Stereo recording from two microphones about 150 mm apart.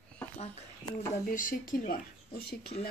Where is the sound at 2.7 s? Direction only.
45° left (ahead or behind).